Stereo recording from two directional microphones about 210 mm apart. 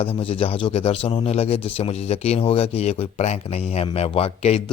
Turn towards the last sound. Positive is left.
turn(degrees=30)  # may be behind; listen again after turning